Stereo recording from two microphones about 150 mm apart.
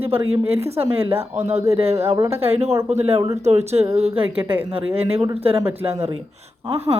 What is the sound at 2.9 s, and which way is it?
Speech, 45° right (ahead or behind).